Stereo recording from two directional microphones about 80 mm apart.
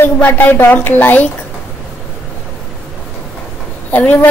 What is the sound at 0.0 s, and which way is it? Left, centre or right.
A woman's voice, left.